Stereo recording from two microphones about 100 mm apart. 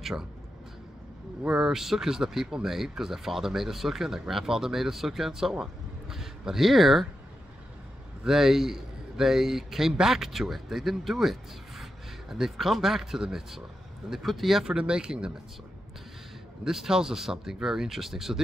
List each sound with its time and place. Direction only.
0.0 s speech: 5° right (ahead or behind)
1.4 s speech: 5° right (ahead or behind)
8.2 s speech: 5° right (ahead or behind)
16.6 s speech: 5° right (ahead or behind)